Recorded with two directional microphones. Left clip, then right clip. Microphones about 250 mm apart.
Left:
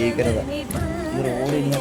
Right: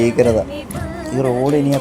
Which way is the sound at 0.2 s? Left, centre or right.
Centre.